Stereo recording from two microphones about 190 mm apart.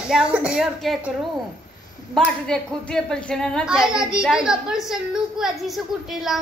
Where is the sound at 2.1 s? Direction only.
5° left (ahead or behind).